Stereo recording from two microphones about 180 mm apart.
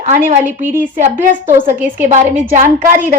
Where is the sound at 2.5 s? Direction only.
50° right (ahead or behind).